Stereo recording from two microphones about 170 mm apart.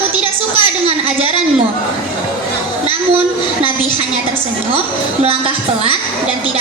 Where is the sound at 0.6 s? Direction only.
35° right (ahead or behind).